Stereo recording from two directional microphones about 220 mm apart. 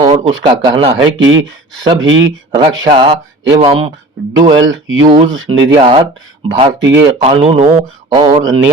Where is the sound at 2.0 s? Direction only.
60° right (ahead or behind).